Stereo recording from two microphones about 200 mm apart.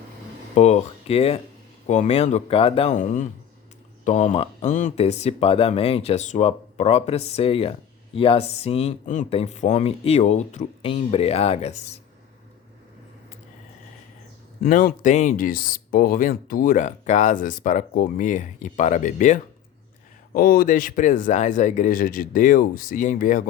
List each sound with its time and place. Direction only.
0.5 s speech: 35° left (ahead or behind)
14.6 s speech: 45° left (ahead or behind)